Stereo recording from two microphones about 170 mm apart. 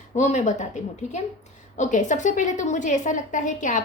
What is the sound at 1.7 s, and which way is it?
A woman's voice, 45° left (ahead or behind).